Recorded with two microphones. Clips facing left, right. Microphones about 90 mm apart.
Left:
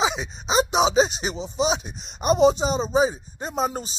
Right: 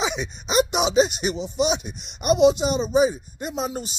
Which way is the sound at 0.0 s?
30° left (ahead or behind).